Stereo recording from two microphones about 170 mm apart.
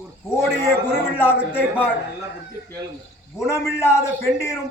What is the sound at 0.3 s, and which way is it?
A man's voice, 15° left (ahead or behind).